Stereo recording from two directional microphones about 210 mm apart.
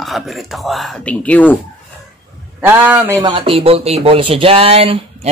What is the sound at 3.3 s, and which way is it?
Speech, 25° right (ahead or behind).